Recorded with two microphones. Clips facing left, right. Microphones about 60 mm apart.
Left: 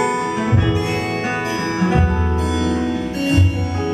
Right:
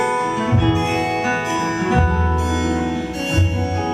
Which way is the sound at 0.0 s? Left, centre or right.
Centre.